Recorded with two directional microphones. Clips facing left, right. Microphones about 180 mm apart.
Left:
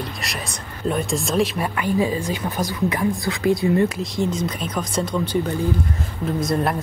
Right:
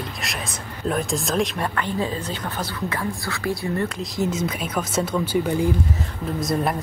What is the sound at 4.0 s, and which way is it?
Speech, 5° right (ahead or behind).